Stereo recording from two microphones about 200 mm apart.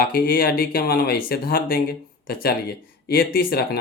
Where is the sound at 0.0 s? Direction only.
45° left (ahead or behind).